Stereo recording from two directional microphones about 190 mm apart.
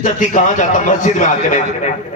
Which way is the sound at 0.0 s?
40° left (ahead or behind).